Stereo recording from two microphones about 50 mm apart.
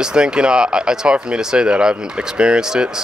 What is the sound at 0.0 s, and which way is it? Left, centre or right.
Speech, centre.